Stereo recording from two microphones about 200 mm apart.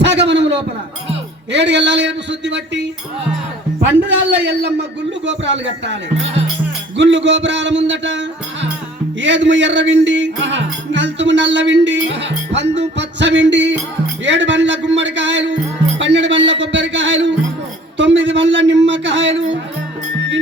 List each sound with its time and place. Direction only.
0.0 s a sound: 60° right (ahead or behind)
1.5 s music: 60° right (ahead or behind)
4.4 s music: 60° right (ahead or behind)